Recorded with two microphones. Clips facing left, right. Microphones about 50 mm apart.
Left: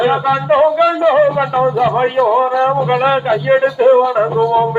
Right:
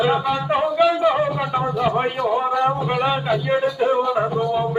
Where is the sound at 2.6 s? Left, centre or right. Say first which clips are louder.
Left 7 dB; left.